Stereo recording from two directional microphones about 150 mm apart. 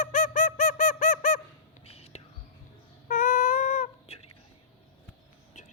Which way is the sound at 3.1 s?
60° left (ahead or behind).